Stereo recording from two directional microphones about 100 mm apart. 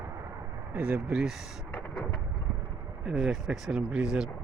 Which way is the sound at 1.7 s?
15° left (ahead or behind).